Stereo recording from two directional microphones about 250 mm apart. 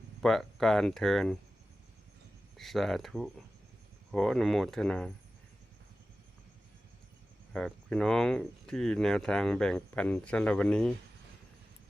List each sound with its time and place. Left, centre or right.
0.2 s speech: centre
2.6 s speech: centre
7.5 s speech: centre